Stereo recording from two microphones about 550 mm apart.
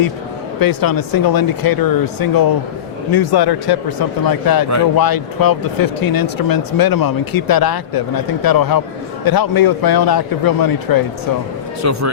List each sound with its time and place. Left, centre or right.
0.6 s speech: left
11.8 s speech: right